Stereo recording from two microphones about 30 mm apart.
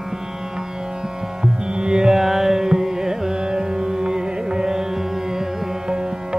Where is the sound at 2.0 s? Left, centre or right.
Centre.